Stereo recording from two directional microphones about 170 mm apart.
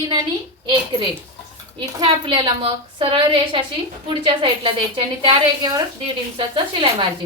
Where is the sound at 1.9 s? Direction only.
30° right (ahead or behind).